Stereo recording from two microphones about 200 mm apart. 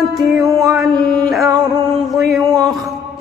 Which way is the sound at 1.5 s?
20° right (ahead or behind).